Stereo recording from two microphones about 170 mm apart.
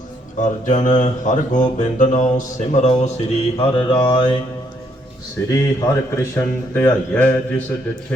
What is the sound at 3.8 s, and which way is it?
Mantra, 35° left (ahead or behind).